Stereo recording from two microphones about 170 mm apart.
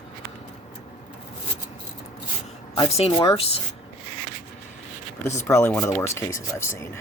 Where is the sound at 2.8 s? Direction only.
35° left (ahead or behind).